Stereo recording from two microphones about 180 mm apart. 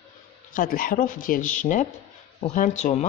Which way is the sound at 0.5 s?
50° left (ahead or behind).